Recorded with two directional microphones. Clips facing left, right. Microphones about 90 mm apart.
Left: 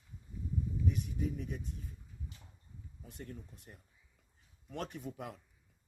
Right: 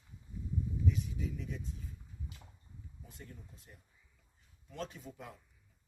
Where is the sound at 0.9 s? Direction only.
50° left (ahead or behind).